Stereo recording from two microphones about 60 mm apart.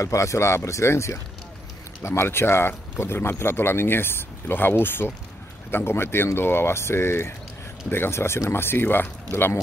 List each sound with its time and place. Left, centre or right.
0.0 s speech: left